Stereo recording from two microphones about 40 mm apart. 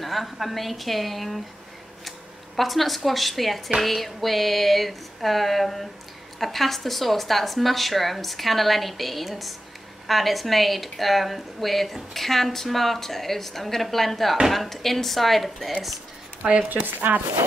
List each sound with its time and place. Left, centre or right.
0.0 s a woman's voice: centre
2.0 s a sound: centre
3.1 s a woman's voice: centre
16.6 s speech: right